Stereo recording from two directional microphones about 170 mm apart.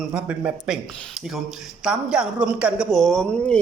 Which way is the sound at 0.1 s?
5° right (ahead or behind).